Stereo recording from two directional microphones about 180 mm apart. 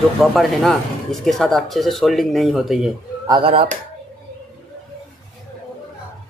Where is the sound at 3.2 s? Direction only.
25° right (ahead or behind).